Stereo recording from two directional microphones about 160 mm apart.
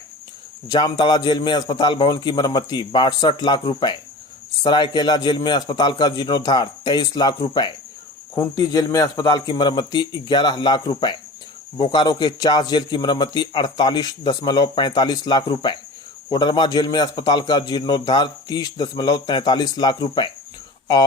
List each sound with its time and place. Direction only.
0.7 s a man's voice: 25° left (ahead or behind)